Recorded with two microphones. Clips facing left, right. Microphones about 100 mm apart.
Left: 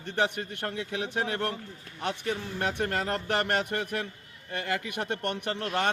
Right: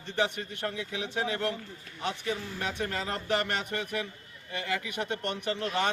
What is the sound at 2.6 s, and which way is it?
Speech, 55° left (ahead or behind).